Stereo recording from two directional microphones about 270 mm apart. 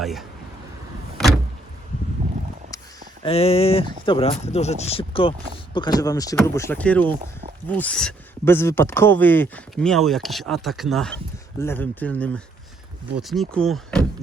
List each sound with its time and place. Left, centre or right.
0.0 s speech: centre
1.2 s vehicle: centre
3.2 s speech: left; by 14.1 s centre